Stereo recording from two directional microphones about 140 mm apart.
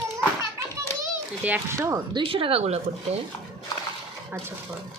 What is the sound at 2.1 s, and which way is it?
Speech, 40° right (ahead or behind).